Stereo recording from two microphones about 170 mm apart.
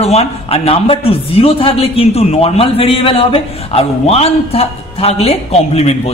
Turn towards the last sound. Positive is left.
turn(degrees=40)  # may be behind; listen again after turning